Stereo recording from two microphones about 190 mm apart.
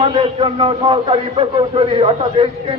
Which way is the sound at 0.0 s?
25° right (ahead or behind).